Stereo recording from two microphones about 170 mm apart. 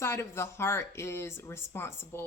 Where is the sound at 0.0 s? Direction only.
15° left (ahead or behind).